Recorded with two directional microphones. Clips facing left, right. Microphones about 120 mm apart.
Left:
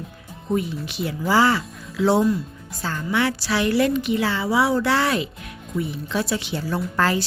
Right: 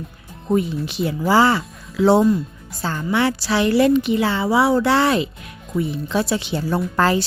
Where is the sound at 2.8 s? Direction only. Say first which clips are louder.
Right 3 dB; 30° right (ahead or behind).